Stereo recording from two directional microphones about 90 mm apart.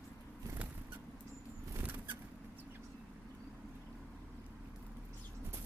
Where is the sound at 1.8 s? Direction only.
20° right (ahead or behind).